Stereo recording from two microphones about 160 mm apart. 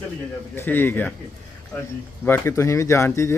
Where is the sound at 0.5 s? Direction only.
15° left (ahead or behind).